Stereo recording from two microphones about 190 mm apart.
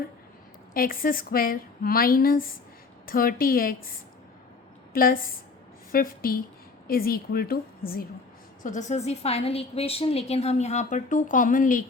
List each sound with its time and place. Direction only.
0.7 s speech: 50° left (ahead or behind)
4.9 s speech: 50° left (ahead or behind)
8.6 s a woman's voice: 40° left (ahead or behind)